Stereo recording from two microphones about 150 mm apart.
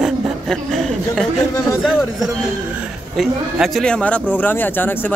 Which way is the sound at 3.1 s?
Centre (ahead or behind).